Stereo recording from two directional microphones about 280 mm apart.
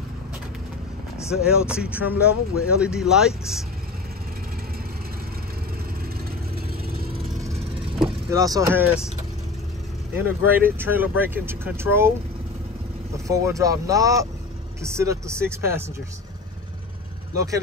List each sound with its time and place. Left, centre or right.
1.3 s speech: centre
6.9 s vehicle: right
8.0 s speech: centre
10.2 s speech: centre
13.1 s speech: centre